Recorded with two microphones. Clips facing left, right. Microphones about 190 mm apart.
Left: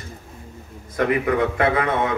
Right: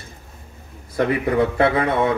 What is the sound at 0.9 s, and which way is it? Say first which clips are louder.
Speech: right 1 dB; 30° right (ahead or behind).